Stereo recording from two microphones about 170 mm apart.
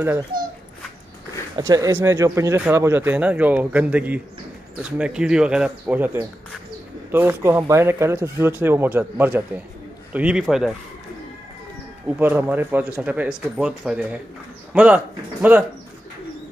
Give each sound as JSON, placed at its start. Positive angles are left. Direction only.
{"t": 0.3, "sound": "speech", "side_deg": -55}
{"t": 1.6, "sound": "speech", "side_deg": -20}
{"t": 12.1, "sound": "speech", "side_deg": -10}